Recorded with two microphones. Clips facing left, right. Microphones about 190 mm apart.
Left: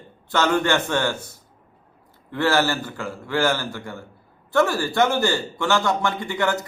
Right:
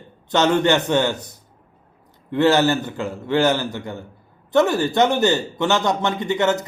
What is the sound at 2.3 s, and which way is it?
A man's voice, 20° right (ahead or behind).